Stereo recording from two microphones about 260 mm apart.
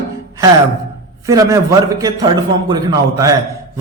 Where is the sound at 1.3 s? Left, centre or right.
Centre.